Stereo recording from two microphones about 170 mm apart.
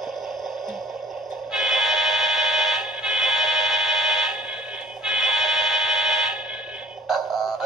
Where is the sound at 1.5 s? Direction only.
Centre (ahead or behind).